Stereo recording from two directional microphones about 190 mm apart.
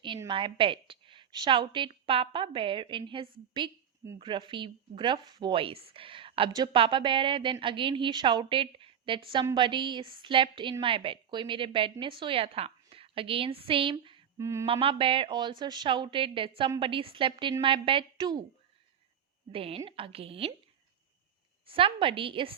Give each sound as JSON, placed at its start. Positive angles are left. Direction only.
{"t": 0.3, "sound": "a woman's voice", "side_deg": -25}
{"t": 14.3, "sound": "a sound", "side_deg": -15}
{"t": 14.7, "sound": "a woman's voice", "side_deg": -30}
{"t": 19.5, "sound": "a woman's voice", "side_deg": -30}
{"t": 21.7, "sound": "a woman's voice", "side_deg": -30}